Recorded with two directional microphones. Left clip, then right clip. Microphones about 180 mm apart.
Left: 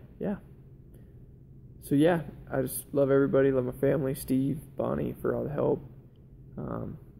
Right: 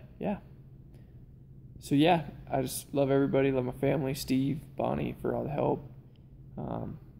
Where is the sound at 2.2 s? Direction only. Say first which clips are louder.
Left 1 dB; 15° right (ahead or behind).